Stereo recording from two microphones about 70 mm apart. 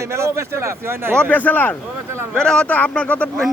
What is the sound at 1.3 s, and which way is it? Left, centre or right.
Speech, left.